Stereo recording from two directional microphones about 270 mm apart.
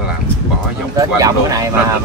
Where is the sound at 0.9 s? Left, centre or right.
Centre.